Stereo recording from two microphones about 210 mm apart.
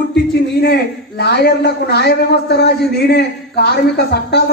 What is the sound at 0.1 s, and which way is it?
A man's voice, 50° left (ahead or behind).